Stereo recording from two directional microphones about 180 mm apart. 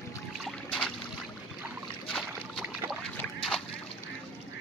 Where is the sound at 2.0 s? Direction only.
Centre (ahead or behind).